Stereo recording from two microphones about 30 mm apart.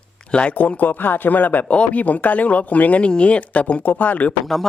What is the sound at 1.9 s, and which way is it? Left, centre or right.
Speech, left.